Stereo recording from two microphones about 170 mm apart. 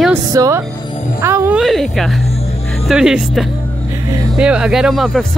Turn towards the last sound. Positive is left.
turn(degrees=0)  # may be behind; listen again after turning